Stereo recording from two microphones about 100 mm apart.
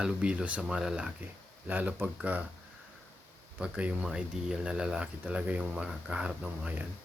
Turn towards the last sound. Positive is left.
turn(degrees=-10)  # may be behind; listen again after turning